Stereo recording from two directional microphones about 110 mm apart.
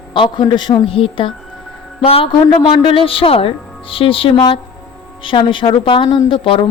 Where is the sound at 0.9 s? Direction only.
55° left (ahead or behind).